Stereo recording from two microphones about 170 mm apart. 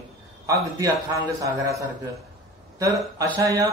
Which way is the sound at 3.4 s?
20° right (ahead or behind).